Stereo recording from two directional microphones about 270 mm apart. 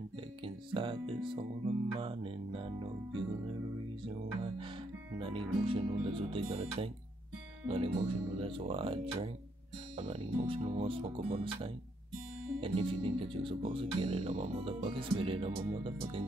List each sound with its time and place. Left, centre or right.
0.7 s speech: centre
4.0 s music: centre
5.2 s speech: centre